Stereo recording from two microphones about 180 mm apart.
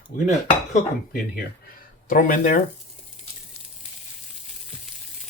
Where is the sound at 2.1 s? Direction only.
50° left (ahead or behind).